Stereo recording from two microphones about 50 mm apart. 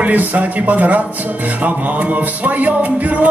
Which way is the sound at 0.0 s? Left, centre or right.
Right.